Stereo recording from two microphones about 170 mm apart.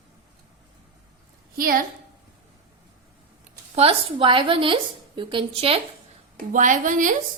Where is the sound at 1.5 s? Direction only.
60° right (ahead or behind).